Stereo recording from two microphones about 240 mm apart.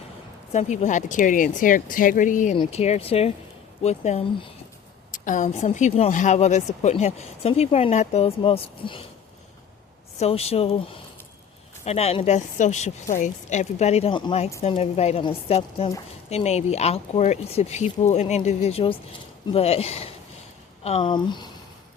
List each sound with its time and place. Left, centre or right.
0.5 s speech: left
10.2 s speech: left